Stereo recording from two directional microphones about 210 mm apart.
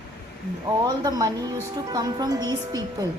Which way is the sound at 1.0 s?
15° right (ahead or behind).